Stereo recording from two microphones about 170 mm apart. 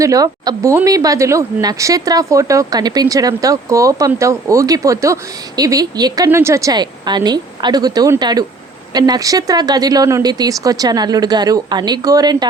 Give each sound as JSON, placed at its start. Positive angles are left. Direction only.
{"t": 0.0, "sound": "speech", "side_deg": -20}